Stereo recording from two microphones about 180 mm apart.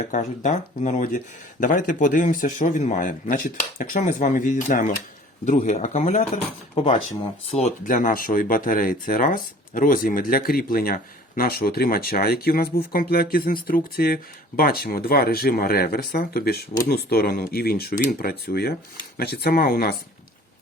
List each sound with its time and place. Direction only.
0.0 s speech: 40° left (ahead or behind)